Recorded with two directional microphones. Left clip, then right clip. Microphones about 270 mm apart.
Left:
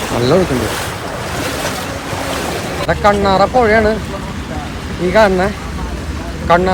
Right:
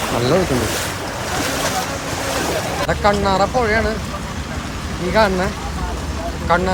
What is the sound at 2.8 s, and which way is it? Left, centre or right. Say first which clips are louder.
Speech: left 5 dB; centre.